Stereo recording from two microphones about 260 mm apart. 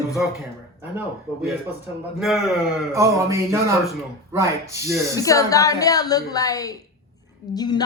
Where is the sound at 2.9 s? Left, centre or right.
Centre.